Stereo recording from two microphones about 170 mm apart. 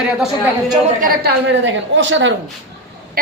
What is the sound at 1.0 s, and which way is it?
A woman's voice, 75° right (ahead or behind).